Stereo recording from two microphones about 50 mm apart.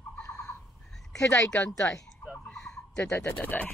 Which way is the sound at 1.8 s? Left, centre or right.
Left.